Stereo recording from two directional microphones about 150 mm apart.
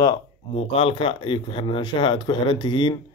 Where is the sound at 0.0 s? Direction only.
30° left (ahead or behind).